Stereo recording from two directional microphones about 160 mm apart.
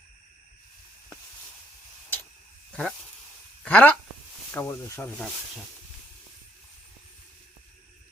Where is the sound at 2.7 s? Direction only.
5° left (ahead or behind).